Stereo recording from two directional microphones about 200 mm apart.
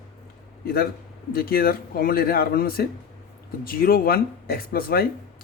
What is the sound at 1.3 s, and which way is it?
Speech, 50° left (ahead or behind).